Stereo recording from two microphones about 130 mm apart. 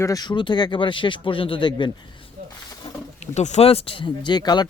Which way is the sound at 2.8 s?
45° left (ahead or behind).